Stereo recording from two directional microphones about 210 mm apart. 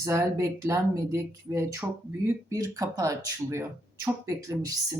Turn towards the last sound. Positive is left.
turn(degrees=-15)  # may be behind; listen again after turning